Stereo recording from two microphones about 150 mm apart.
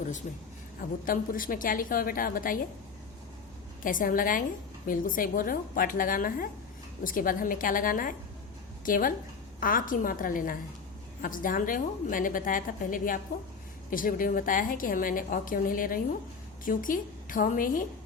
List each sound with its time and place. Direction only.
0.8 s a woman's voice: 70° left (ahead or behind)
3.8 s a woman's voice: 65° left (ahead or behind)